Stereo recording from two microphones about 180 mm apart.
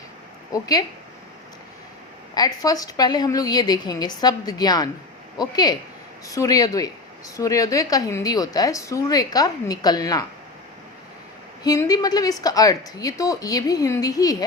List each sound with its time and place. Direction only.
0.5 s a woman's voice: 20° left (ahead or behind)
2.3 s a woman's voice: 20° left (ahead or behind)
11.6 s a woman's voice: 20° left (ahead or behind)